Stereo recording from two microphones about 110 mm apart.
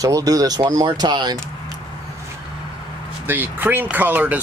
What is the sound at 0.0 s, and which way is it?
Speech, 30° right (ahead or behind).